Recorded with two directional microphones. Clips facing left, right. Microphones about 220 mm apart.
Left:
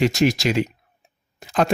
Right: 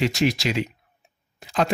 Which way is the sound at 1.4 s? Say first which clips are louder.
Left 3 dB; 50° left (ahead or behind).